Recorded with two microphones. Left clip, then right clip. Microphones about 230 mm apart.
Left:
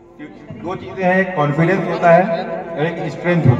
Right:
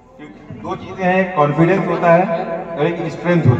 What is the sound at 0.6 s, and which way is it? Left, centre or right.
A man's voice, left.